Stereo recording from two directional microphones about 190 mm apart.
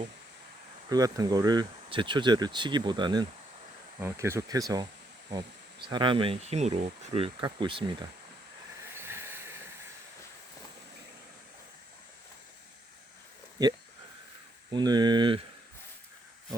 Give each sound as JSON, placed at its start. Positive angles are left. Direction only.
{"t": 0.9, "sound": "speech", "side_deg": -20}
{"t": 9.0, "sound": "train", "side_deg": -15}
{"t": 13.6, "sound": "speech", "side_deg": -20}